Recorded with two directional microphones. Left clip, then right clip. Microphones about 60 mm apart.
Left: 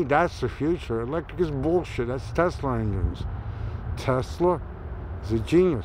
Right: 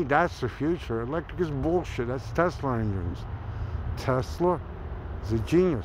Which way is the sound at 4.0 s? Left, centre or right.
Right.